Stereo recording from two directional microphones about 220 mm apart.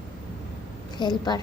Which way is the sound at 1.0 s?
20° left (ahead or behind).